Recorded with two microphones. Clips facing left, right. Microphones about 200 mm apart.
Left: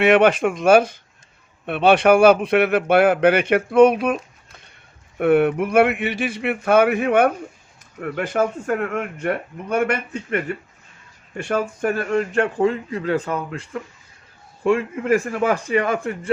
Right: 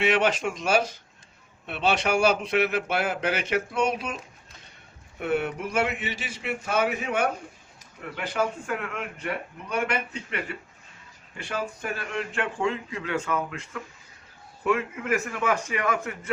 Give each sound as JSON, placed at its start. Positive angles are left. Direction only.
{"t": 0.0, "sound": "a man's voice", "side_deg": 55}
{"t": 5.2, "sound": "a man's voice", "side_deg": 60}